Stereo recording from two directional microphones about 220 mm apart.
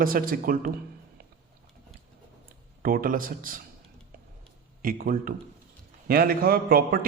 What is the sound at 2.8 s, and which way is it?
Speech, 40° right (ahead or behind).